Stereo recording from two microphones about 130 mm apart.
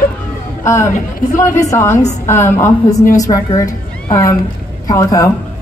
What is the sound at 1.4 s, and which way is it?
A woman's voice, 25° left (ahead or behind).